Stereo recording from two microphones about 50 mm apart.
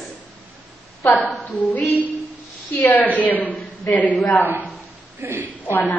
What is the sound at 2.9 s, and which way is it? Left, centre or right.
A woman's voice, left.